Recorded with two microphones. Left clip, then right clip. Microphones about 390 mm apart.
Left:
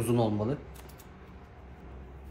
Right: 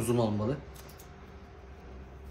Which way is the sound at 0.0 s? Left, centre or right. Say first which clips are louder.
Left 1 dB; centre.